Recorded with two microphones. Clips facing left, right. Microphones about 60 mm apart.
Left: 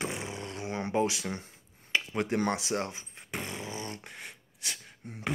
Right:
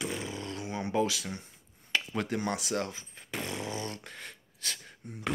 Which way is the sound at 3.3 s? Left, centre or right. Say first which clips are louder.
Right 2 dB; centre.